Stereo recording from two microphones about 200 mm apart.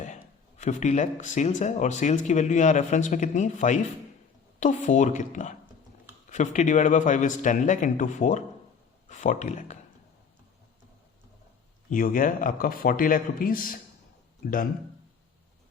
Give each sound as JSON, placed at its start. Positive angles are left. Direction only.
{"t": 0.6, "sound": "speech", "side_deg": 35}
{"t": 11.9, "sound": "a man's voice", "side_deg": 45}